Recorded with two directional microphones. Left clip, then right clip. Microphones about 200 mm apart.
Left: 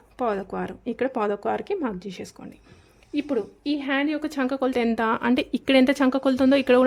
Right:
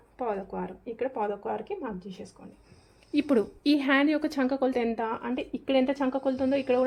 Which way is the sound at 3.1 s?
5° right (ahead or behind).